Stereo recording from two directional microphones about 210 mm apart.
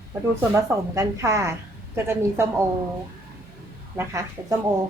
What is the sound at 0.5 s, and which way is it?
Speech, 15° right (ahead or behind).